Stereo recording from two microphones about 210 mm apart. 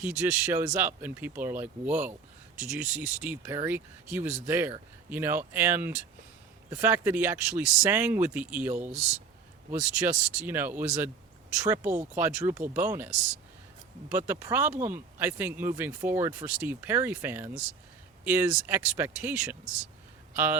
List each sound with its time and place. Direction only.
0.0 s speech: 10° right (ahead or behind)
10.0 s speech: 10° right (ahead or behind)
14.1 s speech: 10° right (ahead or behind)